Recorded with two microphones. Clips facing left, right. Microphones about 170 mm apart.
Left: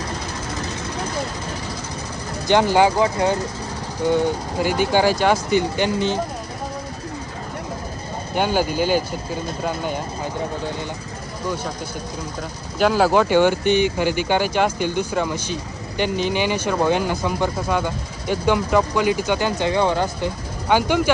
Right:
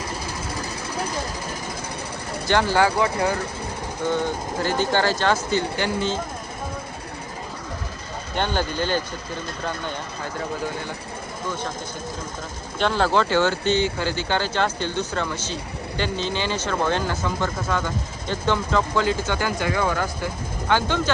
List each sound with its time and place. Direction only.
2.5 s speech: 15° left (ahead or behind)
3.0 s speech: 30° left (ahead or behind)
4.0 s speech: 15° left (ahead or behind)
8.4 s speech: 10° left (ahead or behind)
12.8 s speech: 10° left (ahead or behind)